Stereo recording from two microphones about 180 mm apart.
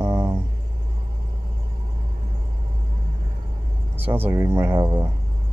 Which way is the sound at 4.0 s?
10° right (ahead or behind).